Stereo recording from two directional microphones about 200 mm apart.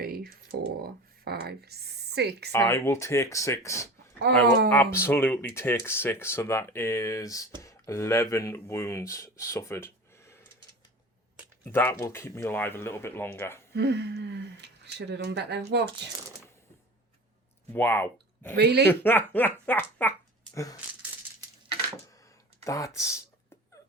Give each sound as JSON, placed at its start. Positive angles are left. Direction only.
{"t": 0.0, "sound": "a sound", "side_deg": -50}
{"t": 2.5, "sound": "speech", "side_deg": 15}
{"t": 4.3, "sound": "speech", "side_deg": -55}
{"t": 4.7, "sound": "speech", "side_deg": 10}
{"t": 11.6, "sound": "speech", "side_deg": 10}
{"t": 13.7, "sound": "speech", "side_deg": -55}
{"t": 17.7, "sound": "speech", "side_deg": 10}
{"t": 18.5, "sound": "speech", "side_deg": -55}
{"t": 18.9, "sound": "speech", "side_deg": 10}
{"t": 22.6, "sound": "speech", "side_deg": 15}